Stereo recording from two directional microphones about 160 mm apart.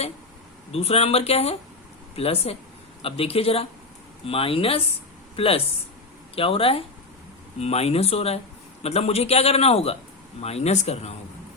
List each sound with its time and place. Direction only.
0.7 s a man's voice: 40° left (ahead or behind)